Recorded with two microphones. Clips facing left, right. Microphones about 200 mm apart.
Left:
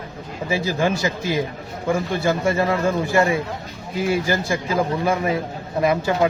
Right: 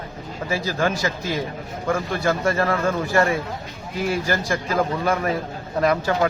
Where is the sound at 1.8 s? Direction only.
10° left (ahead or behind).